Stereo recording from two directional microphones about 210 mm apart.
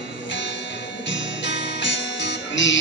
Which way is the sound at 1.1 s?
60° left (ahead or behind).